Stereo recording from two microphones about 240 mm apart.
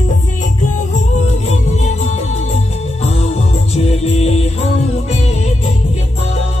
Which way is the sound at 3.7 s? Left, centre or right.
Left.